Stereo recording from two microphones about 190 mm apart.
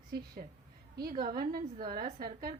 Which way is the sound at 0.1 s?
55° right (ahead or behind).